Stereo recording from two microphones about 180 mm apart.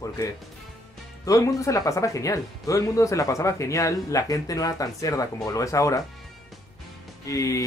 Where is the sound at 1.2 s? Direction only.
20° left (ahead or behind).